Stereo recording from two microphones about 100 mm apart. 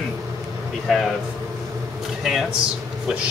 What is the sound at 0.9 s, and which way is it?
Speech, centre (ahead or behind).